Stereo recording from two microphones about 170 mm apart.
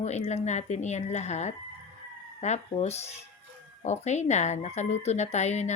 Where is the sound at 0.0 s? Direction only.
40° left (ahead or behind).